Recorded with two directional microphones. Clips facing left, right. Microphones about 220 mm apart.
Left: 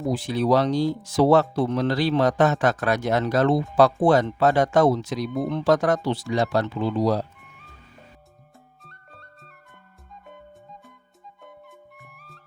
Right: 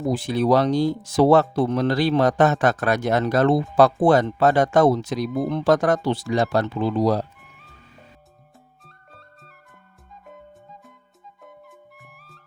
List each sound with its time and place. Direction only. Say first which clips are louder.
0.1 s speech: right 2 dB; 50° right (ahead or behind)
8.8 s flute: even; centre (ahead or behind)
10.2 s music: right 1 dB; centre (ahead or behind)
11.9 s music: even; centre (ahead or behind)